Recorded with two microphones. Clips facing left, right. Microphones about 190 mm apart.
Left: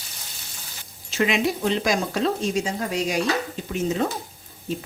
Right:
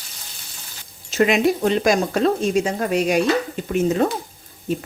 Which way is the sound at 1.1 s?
50° right (ahead or behind).